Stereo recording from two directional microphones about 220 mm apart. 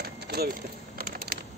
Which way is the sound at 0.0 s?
45° right (ahead or behind).